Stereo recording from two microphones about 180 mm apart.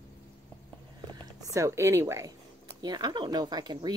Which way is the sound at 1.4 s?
15° right (ahead or behind).